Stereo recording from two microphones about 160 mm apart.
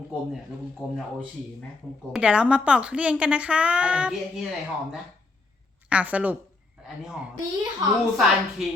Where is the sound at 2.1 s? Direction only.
5° right (ahead or behind).